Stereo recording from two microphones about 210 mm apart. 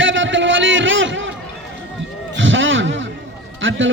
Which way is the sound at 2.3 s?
65° right (ahead or behind).